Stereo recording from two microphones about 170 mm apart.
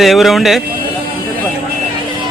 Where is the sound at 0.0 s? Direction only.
Centre (ahead or behind).